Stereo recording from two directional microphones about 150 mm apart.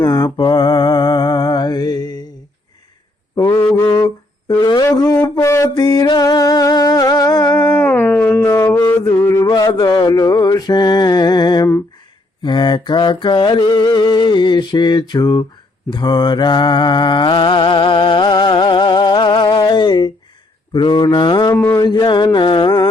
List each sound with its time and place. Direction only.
0.0 s mantra: 25° left (ahead or behind)
3.3 s mantra: 20° left (ahead or behind)
3.8 s humming: 25° left (ahead or behind)
4.6 s a sound: 25° left (ahead or behind)
5.2 s music: 20° left (ahead or behind)
7.7 s mantra: 15° left (ahead or behind)
21.6 s a sound: 15° left (ahead or behind)
21.8 s mantra: 30° left (ahead or behind)